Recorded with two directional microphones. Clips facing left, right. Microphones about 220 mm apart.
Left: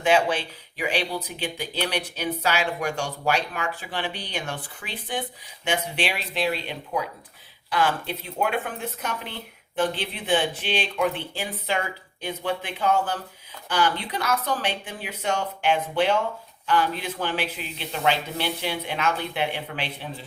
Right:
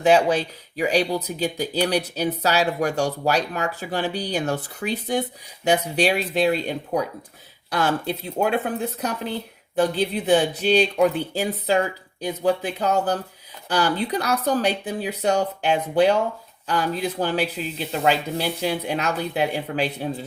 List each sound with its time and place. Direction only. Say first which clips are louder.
0.0 s speech: right 4 dB; 35° right (ahead or behind)